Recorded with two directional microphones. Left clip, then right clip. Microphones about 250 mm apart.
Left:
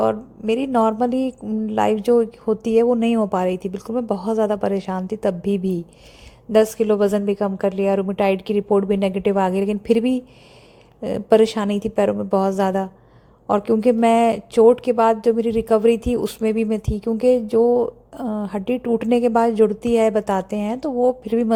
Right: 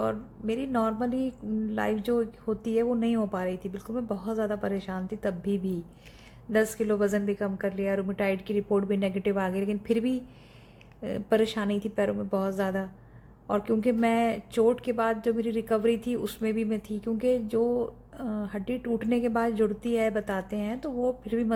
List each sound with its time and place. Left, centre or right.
0.0 s a woman's voice: left